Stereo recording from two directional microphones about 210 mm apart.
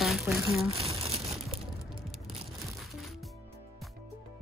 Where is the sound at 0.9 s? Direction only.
30° right (ahead or behind).